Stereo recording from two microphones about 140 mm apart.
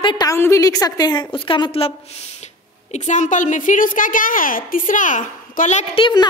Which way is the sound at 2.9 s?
60° left (ahead or behind).